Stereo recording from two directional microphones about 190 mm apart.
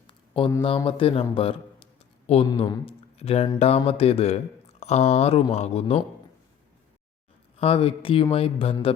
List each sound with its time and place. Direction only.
0.1 s a sound: 25° left (ahead or behind)
0.9 s a man's voice: 30° left (ahead or behind)
7.6 s speech: 30° left (ahead or behind)